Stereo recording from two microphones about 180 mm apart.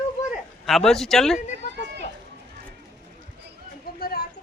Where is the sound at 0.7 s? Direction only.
Centre (ahead or behind).